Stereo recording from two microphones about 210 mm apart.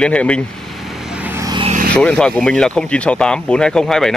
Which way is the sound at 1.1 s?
10° right (ahead or behind).